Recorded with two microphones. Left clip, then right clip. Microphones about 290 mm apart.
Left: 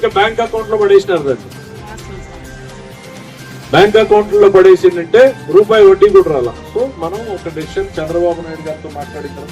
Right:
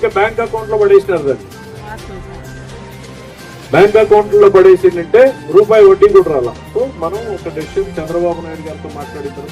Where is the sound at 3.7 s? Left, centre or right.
Left.